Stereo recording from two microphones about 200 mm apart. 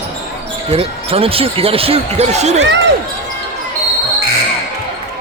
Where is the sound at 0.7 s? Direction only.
30° right (ahead or behind).